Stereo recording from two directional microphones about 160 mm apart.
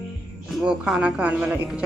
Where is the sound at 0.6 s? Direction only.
5° right (ahead or behind).